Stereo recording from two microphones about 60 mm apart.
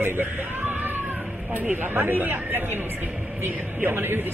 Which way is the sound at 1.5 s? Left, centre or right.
Right.